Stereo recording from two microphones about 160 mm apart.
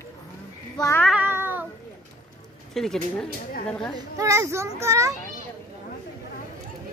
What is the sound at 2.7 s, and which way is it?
Speech, 5° left (ahead or behind).